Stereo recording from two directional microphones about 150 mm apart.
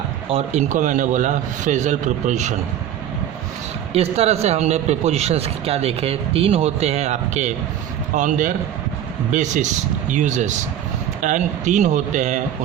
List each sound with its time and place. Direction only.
0.3 s a man's voice: 40° right (ahead or behind)
0.7 s a man's voice: 55° right (ahead or behind)
3.9 s a man's voice: 45° right (ahead or behind)